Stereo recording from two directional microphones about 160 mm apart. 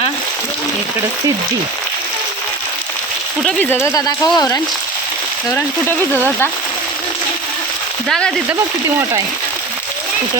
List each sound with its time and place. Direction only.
3.4 s speech: 10° left (ahead or behind)